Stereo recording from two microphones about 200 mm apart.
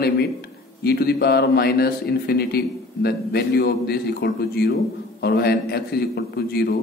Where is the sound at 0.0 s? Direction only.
55° left (ahead or behind).